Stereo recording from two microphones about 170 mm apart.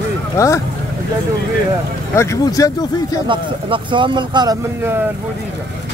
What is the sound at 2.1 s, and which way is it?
Speech, 15° left (ahead or behind).